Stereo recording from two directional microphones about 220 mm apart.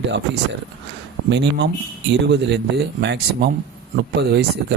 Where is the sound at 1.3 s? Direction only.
50° right (ahead or behind).